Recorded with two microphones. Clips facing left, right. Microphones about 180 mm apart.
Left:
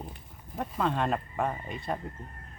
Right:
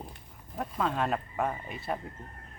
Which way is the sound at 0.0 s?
Centre (ahead or behind).